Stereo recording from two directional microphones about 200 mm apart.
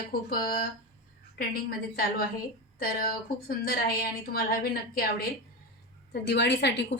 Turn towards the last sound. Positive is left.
turn(degrees=60)  # may be behind; listen again after turning